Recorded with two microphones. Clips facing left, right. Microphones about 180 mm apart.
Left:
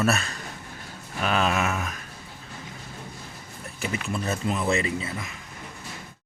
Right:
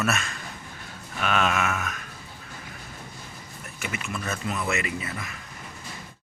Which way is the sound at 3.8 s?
35° left (ahead or behind).